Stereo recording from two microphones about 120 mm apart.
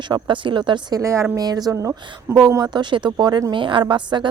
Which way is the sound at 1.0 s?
25° right (ahead or behind).